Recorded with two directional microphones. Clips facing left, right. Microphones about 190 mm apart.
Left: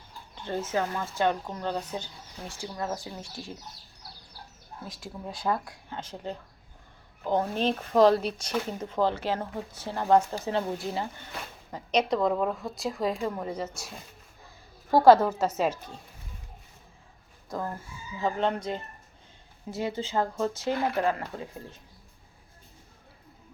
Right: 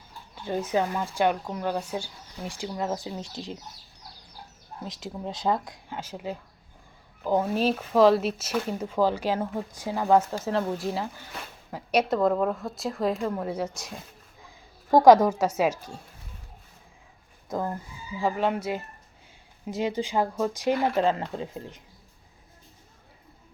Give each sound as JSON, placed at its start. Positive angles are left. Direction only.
{"t": 0.3, "sound": "speech", "side_deg": -10}
{"t": 4.8, "sound": "speech", "side_deg": -20}
{"t": 6.0, "sound": "a woman's voice", "side_deg": -10}
{"t": 18.2, "sound": "speech", "side_deg": -10}